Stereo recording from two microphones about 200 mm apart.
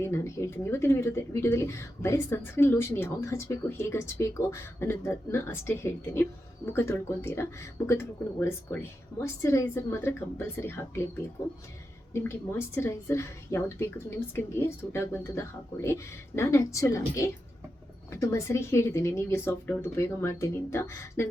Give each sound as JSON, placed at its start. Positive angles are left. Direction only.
{"t": 0.0, "sound": "speech", "side_deg": 15}
{"t": 12.1, "sound": "speech", "side_deg": 10}